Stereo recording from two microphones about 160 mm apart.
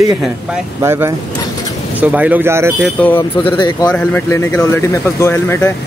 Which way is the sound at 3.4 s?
30° left (ahead or behind).